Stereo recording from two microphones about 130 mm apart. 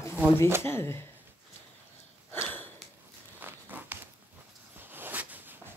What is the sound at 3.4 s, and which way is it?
Walk, 15° right (ahead or behind).